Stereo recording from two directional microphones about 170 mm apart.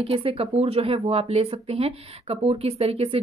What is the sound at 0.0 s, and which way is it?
Speech, 35° right (ahead or behind).